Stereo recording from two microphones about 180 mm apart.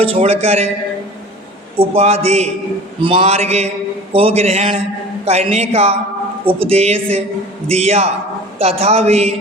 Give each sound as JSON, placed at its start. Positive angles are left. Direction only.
{"t": 0.0, "sound": "a man's voice", "side_deg": -30}
{"t": 1.8, "sound": "a man's voice", "side_deg": -35}